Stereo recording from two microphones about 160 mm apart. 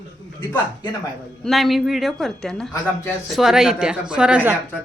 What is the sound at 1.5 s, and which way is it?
A woman's voice, centre (ahead or behind).